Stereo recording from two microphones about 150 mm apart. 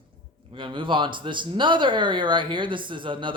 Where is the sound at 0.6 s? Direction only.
35° right (ahead or behind).